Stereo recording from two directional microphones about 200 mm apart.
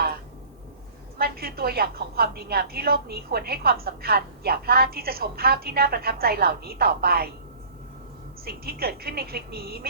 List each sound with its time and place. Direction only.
1.2 s a woman's voice: 50° right (ahead or behind)
8.4 s a woman's voice: 50° right (ahead or behind)